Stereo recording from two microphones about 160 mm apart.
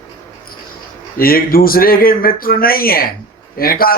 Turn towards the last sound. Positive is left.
turn(degrees=65)  # may be behind; listen again after turning